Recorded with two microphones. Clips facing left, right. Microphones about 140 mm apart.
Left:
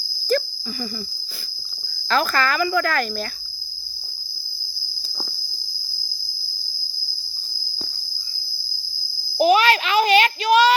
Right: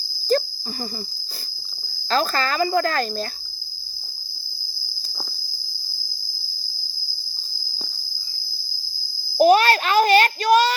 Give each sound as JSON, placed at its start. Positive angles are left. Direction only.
{"t": 0.3, "sound": "cricket", "side_deg": -35}
{"t": 2.0, "sound": "speech", "side_deg": -30}
{"t": 9.4, "sound": "a child's voice", "side_deg": -45}